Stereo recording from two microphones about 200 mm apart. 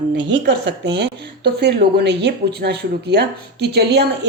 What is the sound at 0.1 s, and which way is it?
A woman's voice, 60° right (ahead or behind).